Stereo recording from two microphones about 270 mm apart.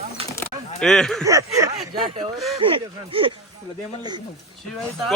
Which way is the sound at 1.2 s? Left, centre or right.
Centre.